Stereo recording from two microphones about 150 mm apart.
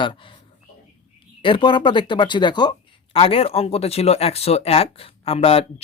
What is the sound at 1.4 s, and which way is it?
Speech, 35° left (ahead or behind).